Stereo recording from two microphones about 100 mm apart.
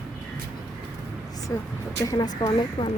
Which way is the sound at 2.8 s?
55° left (ahead or behind).